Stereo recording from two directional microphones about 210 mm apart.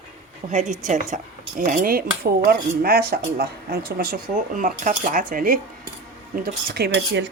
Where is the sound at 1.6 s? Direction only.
40° right (ahead or behind).